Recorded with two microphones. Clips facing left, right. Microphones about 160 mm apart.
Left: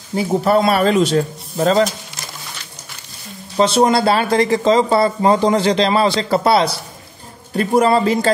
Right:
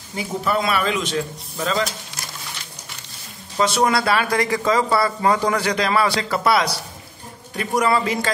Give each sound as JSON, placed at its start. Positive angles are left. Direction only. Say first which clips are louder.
{"t": 0.1, "sound": "speech", "louder": "left 8 dB", "side_deg": 35}
{"t": 3.5, "sound": "speech", "louder": "left 5 dB", "side_deg": 25}